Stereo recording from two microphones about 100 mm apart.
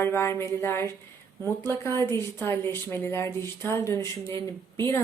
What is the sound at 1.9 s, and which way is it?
Speech, 40° right (ahead or behind).